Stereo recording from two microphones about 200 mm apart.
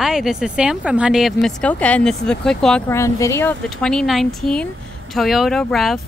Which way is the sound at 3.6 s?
5° left (ahead or behind).